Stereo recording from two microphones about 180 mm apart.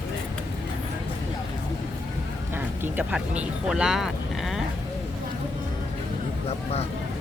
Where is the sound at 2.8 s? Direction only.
10° right (ahead or behind).